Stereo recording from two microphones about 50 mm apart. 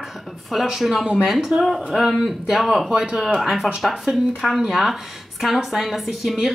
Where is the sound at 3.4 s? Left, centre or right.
Centre.